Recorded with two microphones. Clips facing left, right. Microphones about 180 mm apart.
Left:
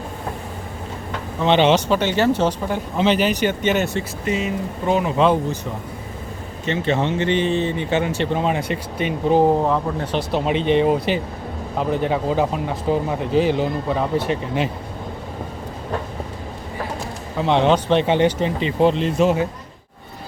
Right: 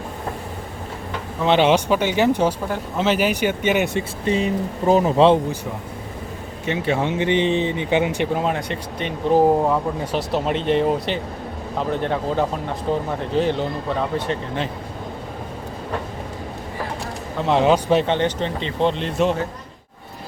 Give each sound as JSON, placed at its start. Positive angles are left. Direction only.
{"t": 1.4, "sound": "speech", "side_deg": -5}
{"t": 4.3, "sound": "speech", "side_deg": -35}
{"t": 6.7, "sound": "speech", "side_deg": -10}
{"t": 8.3, "sound": "speech", "side_deg": 0}
{"t": 9.6, "sound": "speech", "side_deg": -10}
{"t": 17.3, "sound": "speech", "side_deg": 0}
{"t": 18.0, "sound": "speech", "side_deg": 10}